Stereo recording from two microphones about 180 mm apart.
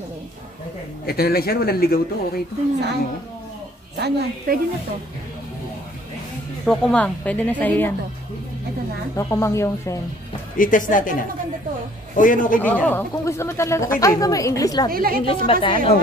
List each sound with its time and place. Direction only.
1.0 s speech: 60° left (ahead or behind)
3.9 s a woman's voice: 60° right (ahead or behind)
6.6 s speech: 5° left (ahead or behind)
9.1 s speech: 15° left (ahead or behind)
10.6 s speech: 45° left (ahead or behind)
12.5 s a woman's voice: 10° left (ahead or behind)
14.9 s a woman's voice: 55° right (ahead or behind)
15.2 s a woman's voice: 30° left (ahead or behind)